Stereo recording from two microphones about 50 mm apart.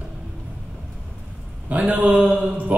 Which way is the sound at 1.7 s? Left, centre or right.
Right.